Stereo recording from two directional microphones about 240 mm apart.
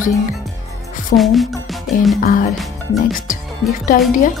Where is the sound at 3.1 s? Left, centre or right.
Left.